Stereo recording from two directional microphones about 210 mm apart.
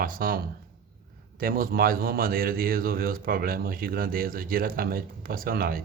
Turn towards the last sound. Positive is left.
turn(degrees=-45)  # may be behind; listen again after turning